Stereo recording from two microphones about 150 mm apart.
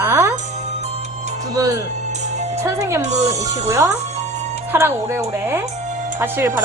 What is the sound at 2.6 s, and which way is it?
A woman's voice, 20° right (ahead or behind).